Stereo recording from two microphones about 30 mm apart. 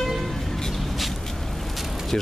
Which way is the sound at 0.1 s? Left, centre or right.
Centre.